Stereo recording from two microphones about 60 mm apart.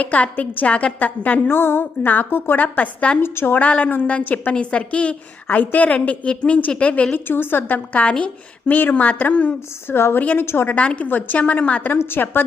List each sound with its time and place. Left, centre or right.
0.0 s a woman's voice: left
1.5 s a woman's voice: left
3.2 s speech: left
3.6 s a woman's voice: left
7.3 s speech: left
8.0 s a woman's voice: centre
8.6 s a woman's voice: left
9.8 s a woman's voice: left
10.7 s a woman's voice: left
11.9 s speech: left